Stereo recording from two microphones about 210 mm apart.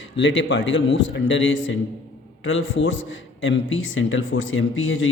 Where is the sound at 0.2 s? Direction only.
60° left (ahead or behind).